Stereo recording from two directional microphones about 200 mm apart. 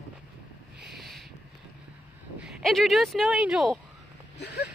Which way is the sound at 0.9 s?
Centre (ahead or behind).